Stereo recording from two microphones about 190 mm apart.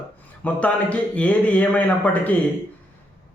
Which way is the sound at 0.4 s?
5° left (ahead or behind).